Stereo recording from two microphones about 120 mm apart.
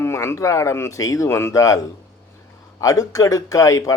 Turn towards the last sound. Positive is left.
turn(degrees=30)  # may be behind; listen again after turning